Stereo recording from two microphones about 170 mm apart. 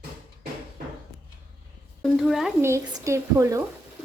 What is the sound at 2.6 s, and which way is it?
A woman's voice, 15° right (ahead or behind).